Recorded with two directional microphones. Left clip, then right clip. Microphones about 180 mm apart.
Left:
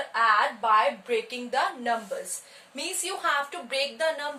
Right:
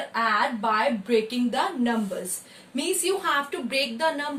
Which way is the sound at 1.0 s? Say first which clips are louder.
Right 5 dB; 15° left (ahead or behind).